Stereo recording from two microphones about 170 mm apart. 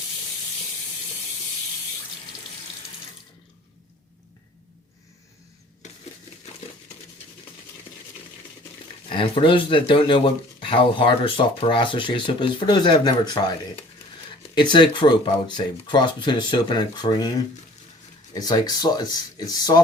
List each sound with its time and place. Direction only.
7.9 s a sound: 35° left (ahead or behind)
9.0 s speech: 30° left (ahead or behind)
18.3 s speech: 20° left (ahead or behind)